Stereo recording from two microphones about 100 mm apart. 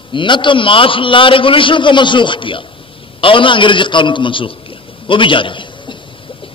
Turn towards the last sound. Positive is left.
turn(degrees=55)  # may be behind; listen again after turning